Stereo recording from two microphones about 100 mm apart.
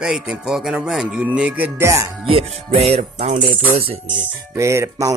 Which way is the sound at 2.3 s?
80° right.